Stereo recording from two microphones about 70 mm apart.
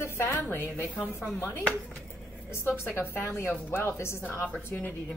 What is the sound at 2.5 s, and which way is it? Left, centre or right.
A woman's voice, left.